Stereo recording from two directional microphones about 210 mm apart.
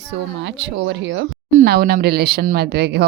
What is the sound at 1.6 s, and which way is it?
A woman's voice, 45° right (ahead or behind).